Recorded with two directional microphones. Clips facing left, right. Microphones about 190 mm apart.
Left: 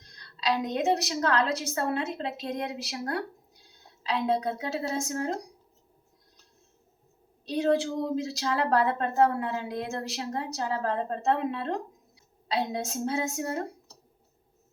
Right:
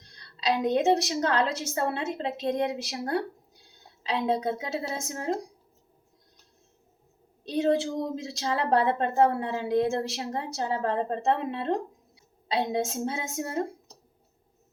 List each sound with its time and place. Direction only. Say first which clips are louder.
0.3 s a woman's voice: right 3 dB; 25° right (ahead or behind)
7.4 s a woman's voice: right 1 dB; 25° right (ahead or behind)